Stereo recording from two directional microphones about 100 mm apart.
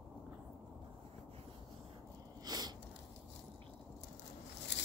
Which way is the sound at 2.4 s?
45° right (ahead or behind).